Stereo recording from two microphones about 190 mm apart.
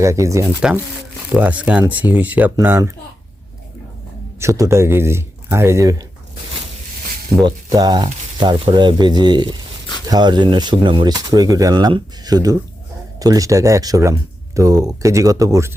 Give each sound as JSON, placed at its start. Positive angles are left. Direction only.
{"t": 0.0, "sound": "speech", "side_deg": -15}
{"t": 0.6, "sound": "speech", "side_deg": -5}
{"t": 4.4, "sound": "speech", "side_deg": -15}
{"t": 7.4, "sound": "speech", "side_deg": -20}